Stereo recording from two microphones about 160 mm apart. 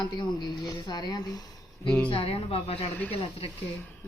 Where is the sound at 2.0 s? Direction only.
35° left (ahead or behind).